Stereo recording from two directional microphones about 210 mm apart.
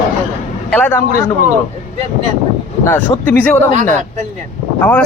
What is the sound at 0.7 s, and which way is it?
Speech, 10° left (ahead or behind).